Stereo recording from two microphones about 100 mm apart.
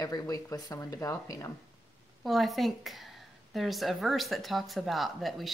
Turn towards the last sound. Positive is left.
turn(degrees=0)  # may be behind; listen again after turning